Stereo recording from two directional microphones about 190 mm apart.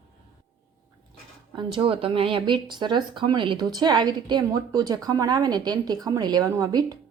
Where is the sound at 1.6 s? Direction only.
25° right (ahead or behind).